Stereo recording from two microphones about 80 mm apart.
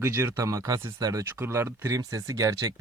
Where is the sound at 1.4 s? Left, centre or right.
Right.